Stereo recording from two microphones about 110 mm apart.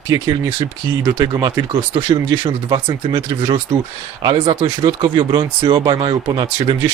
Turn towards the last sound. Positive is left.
turn(degrees=-50)  # may be behind; listen again after turning